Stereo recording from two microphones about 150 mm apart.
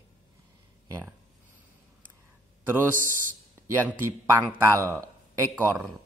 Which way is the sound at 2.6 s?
15° right (ahead or behind).